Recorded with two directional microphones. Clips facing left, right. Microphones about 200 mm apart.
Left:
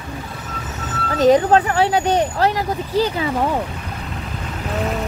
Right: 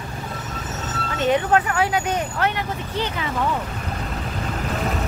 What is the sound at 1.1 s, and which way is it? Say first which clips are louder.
Speech: left 6 dB; 35° left (ahead or behind).